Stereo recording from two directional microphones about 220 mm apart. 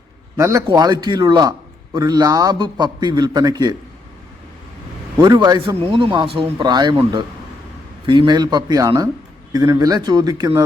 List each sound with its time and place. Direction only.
0.3 s a man's voice: 15° right (ahead or behind)
5.1 s a man's voice: 20° right (ahead or behind)